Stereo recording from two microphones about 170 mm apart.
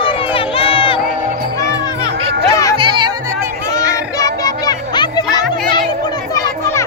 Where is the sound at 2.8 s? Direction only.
30° right (ahead or behind).